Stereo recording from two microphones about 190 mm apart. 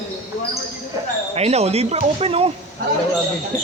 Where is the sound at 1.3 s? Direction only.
35° right (ahead or behind).